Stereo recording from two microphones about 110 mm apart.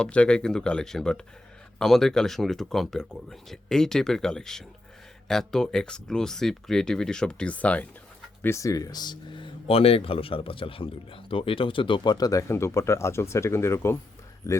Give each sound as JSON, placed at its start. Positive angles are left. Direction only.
{"t": 0.0, "sound": "speech", "side_deg": 10}
{"t": 8.4, "sound": "speech", "side_deg": 25}
{"t": 9.6, "sound": "a man's voice", "side_deg": 60}